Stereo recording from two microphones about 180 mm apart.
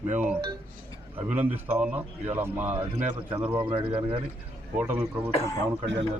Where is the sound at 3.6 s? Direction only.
30° right (ahead or behind).